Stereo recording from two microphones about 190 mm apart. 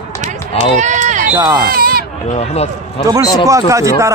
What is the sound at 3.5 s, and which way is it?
Speech, 15° right (ahead or behind).